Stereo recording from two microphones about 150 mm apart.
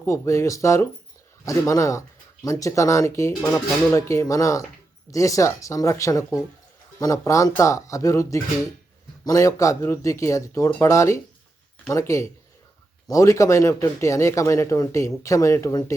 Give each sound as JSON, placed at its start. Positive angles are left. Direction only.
{"t": 0.0, "sound": "speech", "side_deg": 20}